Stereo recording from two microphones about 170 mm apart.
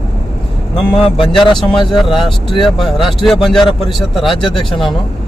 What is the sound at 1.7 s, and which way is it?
Speech, centre (ahead or behind).